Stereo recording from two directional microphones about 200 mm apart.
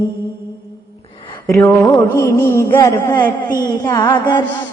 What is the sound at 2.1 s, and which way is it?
A man's voice, 15° left (ahead or behind).